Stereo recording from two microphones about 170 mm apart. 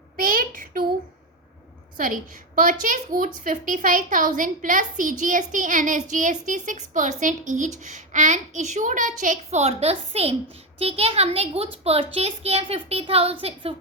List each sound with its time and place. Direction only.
0.2 s a child's voice: 55° right (ahead or behind)
2.0 s a child's voice: 50° right (ahead or behind); by 13.7 s 35° right (ahead or behind)